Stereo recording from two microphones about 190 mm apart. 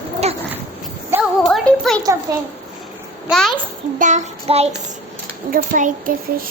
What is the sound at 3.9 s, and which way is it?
Speech, 40° right (ahead or behind).